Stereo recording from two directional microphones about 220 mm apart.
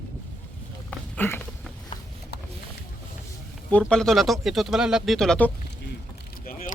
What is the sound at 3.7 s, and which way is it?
Speech, 5° left (ahead or behind).